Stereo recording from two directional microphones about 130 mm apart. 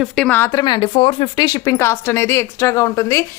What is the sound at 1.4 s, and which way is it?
A woman's voice, 25° left (ahead or behind).